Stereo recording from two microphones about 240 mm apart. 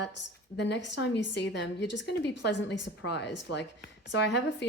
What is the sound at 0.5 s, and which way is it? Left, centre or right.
A woman's voice, left.